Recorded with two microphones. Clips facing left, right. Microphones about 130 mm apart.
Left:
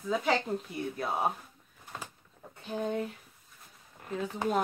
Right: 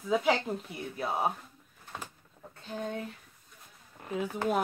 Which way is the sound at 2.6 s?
15° left (ahead or behind).